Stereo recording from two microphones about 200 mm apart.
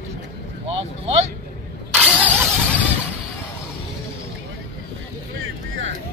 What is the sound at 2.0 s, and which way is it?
Vehicle, 5° right (ahead or behind).